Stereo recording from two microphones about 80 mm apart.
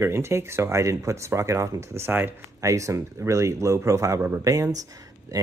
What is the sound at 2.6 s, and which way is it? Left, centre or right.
Speech, right.